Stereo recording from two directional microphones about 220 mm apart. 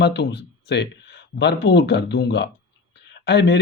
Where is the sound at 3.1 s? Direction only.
50° left (ahead or behind).